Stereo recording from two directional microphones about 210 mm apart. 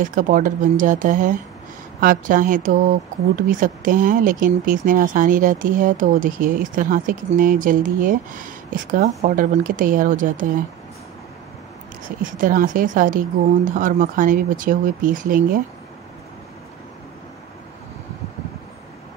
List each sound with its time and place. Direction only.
0.0 s speech: 40° right (ahead or behind)
12.2 s speech: 40° right (ahead or behind)